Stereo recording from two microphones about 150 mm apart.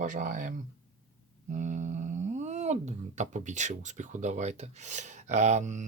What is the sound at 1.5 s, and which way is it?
Speech, 55° right (ahead or behind).